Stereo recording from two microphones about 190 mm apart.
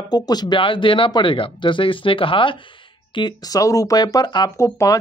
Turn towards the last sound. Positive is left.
turn(degrees=15)  # may be behind; listen again after turning